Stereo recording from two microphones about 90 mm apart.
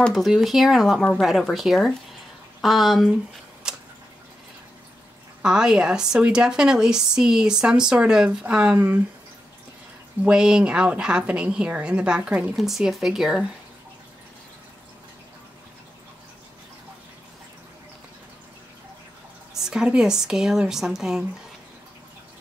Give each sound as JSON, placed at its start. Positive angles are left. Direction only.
{"t": 0.1, "sound": "speech", "side_deg": 0}
{"t": 5.4, "sound": "a woman's voice", "side_deg": -10}
{"t": 8.7, "sound": "speech", "side_deg": -20}
{"t": 10.2, "sound": "a woman's voice", "side_deg": -10}
{"t": 19.5, "sound": "a woman's voice", "side_deg": -5}